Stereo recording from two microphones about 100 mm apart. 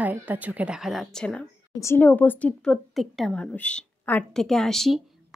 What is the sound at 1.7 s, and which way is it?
Speech, 30° left (ahead or behind).